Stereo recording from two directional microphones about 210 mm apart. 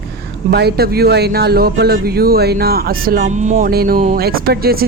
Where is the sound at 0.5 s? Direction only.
50° right (ahead or behind).